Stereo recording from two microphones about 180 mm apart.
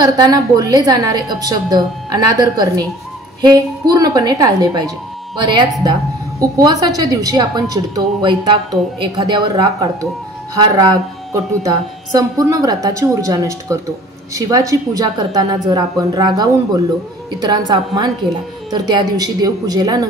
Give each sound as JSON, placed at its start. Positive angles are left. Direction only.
{"t": 0.0, "sound": "a woman's voice", "side_deg": -20}